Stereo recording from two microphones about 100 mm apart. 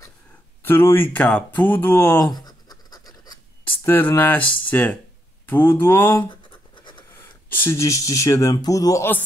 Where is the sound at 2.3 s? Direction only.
40° left (ahead or behind).